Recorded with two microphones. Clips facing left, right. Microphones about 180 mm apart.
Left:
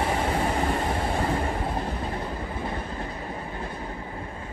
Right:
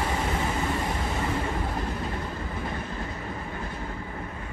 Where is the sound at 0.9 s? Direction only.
30° left (ahead or behind).